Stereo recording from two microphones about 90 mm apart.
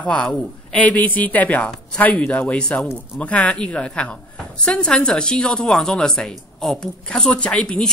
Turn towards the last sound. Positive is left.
turn(degrees=10)  # may be behind; listen again after turning